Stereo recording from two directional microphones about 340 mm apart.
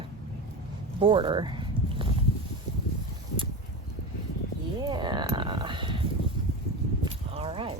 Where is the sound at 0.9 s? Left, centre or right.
Centre.